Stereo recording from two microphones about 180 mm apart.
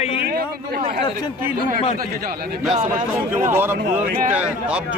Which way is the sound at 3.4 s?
10° right (ahead or behind).